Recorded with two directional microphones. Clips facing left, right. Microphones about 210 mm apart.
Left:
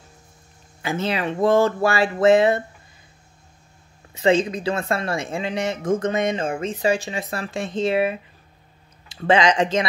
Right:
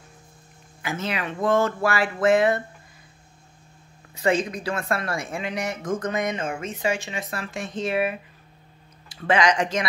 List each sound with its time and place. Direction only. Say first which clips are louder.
0.8 s speech: left 5 dB; 30° left (ahead or behind)
4.1 s speech: left 4 dB; 25° left (ahead or behind)